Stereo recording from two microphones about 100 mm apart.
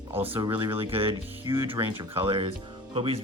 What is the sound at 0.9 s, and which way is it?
Speech, 65° right (ahead or behind).